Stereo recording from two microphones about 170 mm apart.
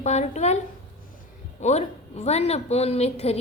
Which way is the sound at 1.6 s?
40° left (ahead or behind).